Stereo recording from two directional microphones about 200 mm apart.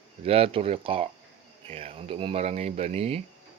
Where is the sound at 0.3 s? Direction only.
30° right (ahead or behind).